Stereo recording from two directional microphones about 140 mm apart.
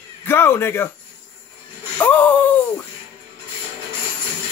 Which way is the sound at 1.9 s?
15° left (ahead or behind).